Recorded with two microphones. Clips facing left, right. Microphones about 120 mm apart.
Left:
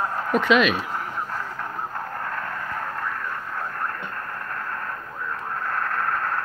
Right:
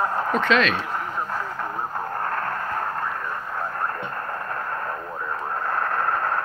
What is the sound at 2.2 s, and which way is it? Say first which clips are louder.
Vehicle: right 4 dB; 50° right (ahead or behind).